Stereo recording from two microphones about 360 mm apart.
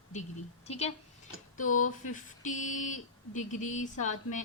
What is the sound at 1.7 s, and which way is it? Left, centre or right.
Speech, left.